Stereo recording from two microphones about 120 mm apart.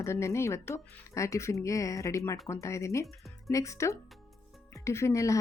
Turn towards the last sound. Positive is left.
turn(degrees=25)  # may be behind; listen again after turning